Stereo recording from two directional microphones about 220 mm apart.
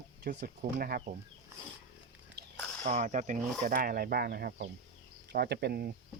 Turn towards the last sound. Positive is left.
turn(degrees=-50)  # may be behind; listen again after turning